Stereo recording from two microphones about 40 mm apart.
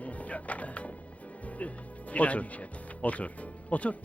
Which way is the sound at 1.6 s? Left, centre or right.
Left.